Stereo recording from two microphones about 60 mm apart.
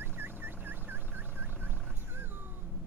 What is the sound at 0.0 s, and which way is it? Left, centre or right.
Fowl, right.